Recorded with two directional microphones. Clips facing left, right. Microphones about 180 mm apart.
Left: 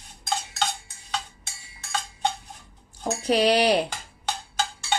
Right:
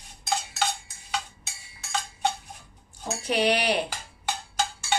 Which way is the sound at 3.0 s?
35° left (ahead or behind).